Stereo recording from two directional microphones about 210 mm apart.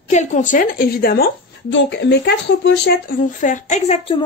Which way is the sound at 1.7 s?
55° left (ahead or behind).